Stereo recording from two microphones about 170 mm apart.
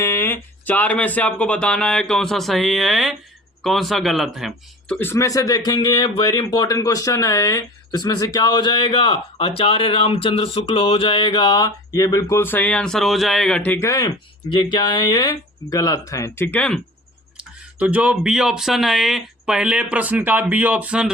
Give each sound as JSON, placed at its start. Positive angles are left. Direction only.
{"t": 0.0, "sound": "speech", "side_deg": 15}
{"t": 4.9, "sound": "a man's voice", "side_deg": 15}
{"t": 17.3, "sound": "speech", "side_deg": -10}